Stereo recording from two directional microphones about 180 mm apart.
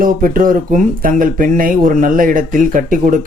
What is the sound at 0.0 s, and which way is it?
Speech, 50° right (ahead or behind).